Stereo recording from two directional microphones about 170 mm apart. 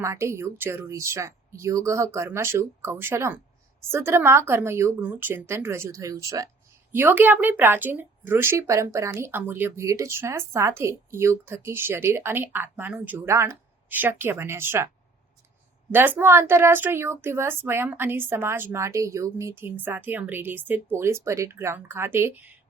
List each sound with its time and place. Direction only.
0.0 s speech: 15° right (ahead or behind)
15.9 s speech: 10° right (ahead or behind)